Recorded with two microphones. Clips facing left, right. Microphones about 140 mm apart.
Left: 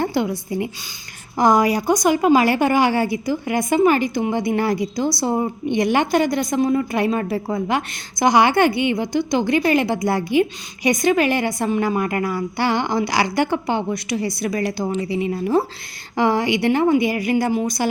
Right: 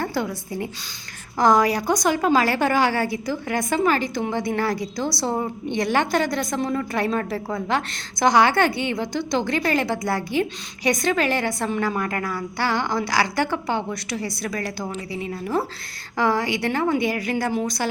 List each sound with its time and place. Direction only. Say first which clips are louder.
0.0 s a woman's voice: left 5 dB; 20° left (ahead or behind)